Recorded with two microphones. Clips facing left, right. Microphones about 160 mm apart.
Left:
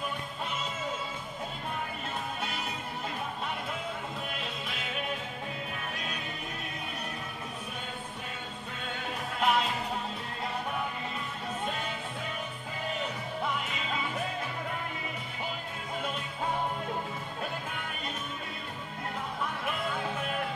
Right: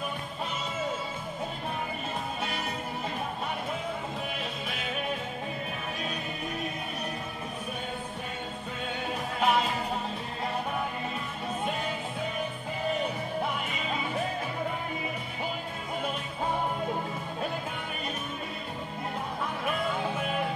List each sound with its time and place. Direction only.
9.4 s music: centre (ahead or behind)